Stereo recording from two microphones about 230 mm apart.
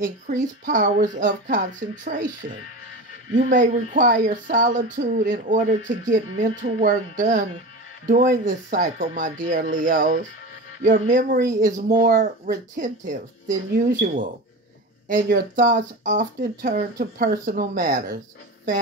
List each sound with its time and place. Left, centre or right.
0.0 s speech: right
3.3 s speech: right
15.0 s speech: right